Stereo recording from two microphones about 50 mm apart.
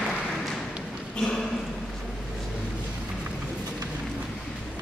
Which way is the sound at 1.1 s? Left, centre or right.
Centre.